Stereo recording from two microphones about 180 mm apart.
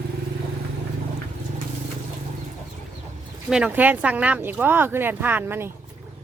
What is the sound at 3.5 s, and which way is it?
Speech, 5° right (ahead or behind).